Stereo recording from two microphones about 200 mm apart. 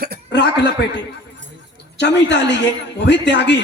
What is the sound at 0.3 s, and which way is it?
Chuckle, 60° left (ahead or behind).